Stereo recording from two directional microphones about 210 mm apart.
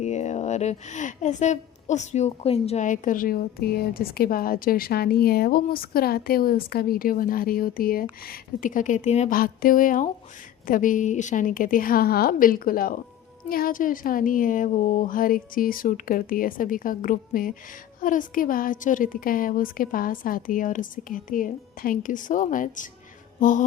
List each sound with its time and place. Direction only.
0.0 s a woman's voice: 35° left (ahead or behind)